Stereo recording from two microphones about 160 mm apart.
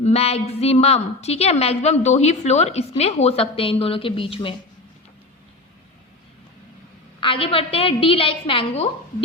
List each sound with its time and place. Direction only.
0.0 s a woman's voice: 40° left (ahead or behind)
7.2 s a woman's voice: 35° left (ahead or behind)